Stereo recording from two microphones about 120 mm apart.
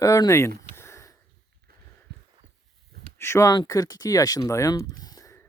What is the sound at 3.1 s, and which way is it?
Speech, 20° left (ahead or behind).